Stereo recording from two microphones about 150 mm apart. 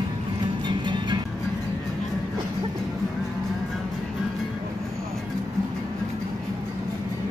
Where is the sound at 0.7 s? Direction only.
30° right (ahead or behind).